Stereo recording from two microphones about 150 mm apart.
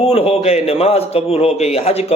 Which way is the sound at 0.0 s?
45° left (ahead or behind).